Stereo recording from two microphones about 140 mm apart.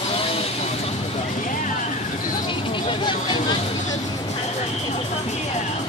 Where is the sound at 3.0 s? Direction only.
35° left (ahead or behind).